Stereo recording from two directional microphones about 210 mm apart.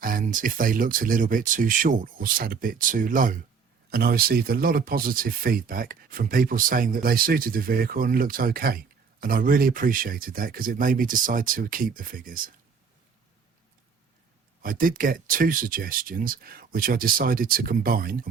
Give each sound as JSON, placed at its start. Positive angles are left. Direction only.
{"t": 0.0, "sound": "speech", "side_deg": -40}
{"t": 14.6, "sound": "speech", "side_deg": -40}